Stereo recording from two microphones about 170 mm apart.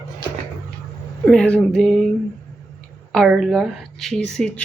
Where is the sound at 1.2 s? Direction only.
5° left (ahead or behind).